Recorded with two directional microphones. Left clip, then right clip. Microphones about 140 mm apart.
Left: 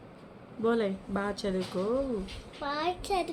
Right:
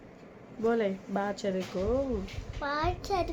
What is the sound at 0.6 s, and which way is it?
Speech, centre (ahead or behind).